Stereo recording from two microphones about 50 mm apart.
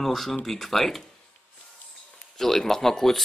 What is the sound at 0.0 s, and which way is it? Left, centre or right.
Speech, centre.